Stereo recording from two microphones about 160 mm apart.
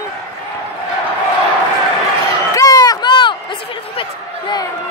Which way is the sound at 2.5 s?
20° left (ahead or behind).